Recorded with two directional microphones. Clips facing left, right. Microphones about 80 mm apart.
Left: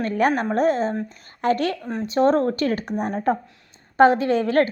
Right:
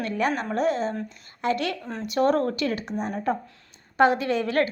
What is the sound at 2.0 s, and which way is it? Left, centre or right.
A woman's voice, left.